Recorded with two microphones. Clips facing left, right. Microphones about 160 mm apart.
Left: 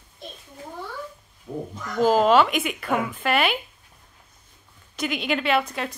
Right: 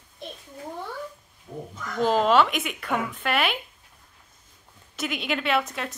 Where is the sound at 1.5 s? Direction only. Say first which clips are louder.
Left 5 dB; 25° left (ahead or behind).